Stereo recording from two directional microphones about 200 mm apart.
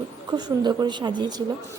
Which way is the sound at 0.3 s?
20° right (ahead or behind).